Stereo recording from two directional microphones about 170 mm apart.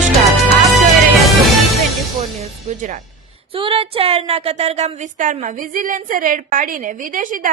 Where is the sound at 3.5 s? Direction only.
30° right (ahead or behind).